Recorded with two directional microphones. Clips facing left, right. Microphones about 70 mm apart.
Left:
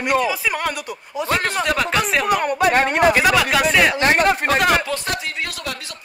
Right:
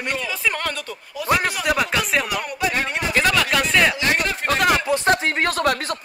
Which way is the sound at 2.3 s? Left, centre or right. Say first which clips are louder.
Left 7 dB; left.